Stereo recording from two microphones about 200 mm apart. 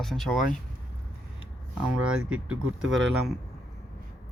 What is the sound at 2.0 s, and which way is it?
Speech, 5° right (ahead or behind).